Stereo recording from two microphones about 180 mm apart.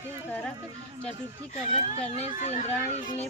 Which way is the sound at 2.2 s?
40° left (ahead or behind).